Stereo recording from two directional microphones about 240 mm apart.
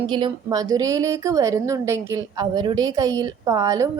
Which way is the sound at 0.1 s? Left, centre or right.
Centre.